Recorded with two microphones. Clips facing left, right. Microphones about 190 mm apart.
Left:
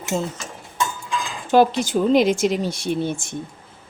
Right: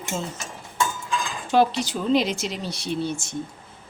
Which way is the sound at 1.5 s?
50° left (ahead or behind).